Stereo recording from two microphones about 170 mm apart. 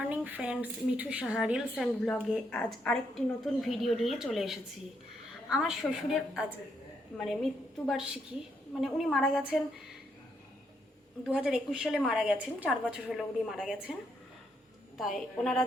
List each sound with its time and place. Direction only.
0.0 s a woman's voice: 10° right (ahead or behind)
7.9 s a woman's voice: centre (ahead or behind)
11.3 s a woman's voice: 5° right (ahead or behind)
14.9 s a woman's voice: centre (ahead or behind)